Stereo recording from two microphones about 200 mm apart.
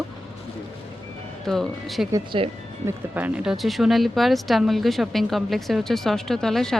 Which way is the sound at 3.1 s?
5° right (ahead or behind).